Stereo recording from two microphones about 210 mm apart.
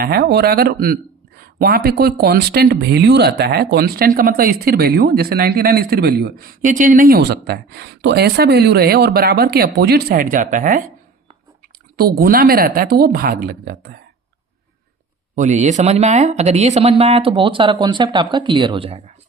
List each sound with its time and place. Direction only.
0.0 s speech: 50° right (ahead or behind)
11.9 s speech: 45° right (ahead or behind)
15.4 s speech: 35° right (ahead or behind)